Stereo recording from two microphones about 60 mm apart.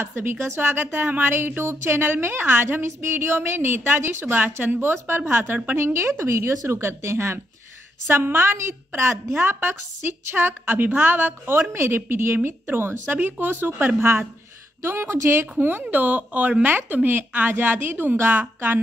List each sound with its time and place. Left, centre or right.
0.0 s a woman's voice: right
4.4 s a woman's voice: right
4.9 s a woman's voice: right
5.9 s a woman's voice: right
15.5 s a woman's voice: right